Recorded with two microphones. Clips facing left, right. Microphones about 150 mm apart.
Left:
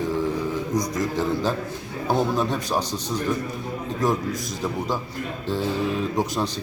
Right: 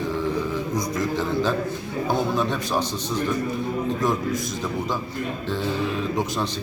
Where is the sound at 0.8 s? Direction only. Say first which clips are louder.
Even; 40° left (ahead or behind).